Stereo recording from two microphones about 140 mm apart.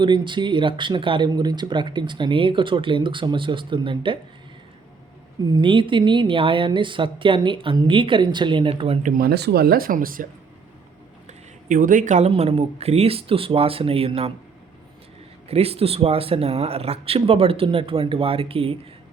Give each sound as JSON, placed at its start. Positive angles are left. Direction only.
{"t": 0.0, "sound": "speech", "side_deg": -35}
{"t": 5.5, "sound": "speech", "side_deg": -30}
{"t": 9.0, "sound": "speech", "side_deg": -90}
{"t": 11.3, "sound": "a sound", "side_deg": -75}
{"t": 12.3, "sound": "speech", "side_deg": -45}
{"t": 15.4, "sound": "speech", "side_deg": -45}